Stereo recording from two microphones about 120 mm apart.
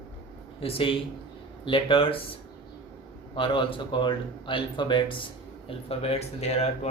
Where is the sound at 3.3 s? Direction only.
45° left (ahead or behind).